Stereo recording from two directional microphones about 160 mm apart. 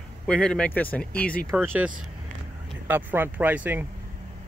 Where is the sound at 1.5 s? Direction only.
10° right (ahead or behind).